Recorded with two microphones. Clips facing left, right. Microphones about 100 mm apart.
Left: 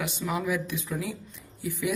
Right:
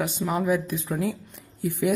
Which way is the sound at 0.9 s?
60° right (ahead or behind).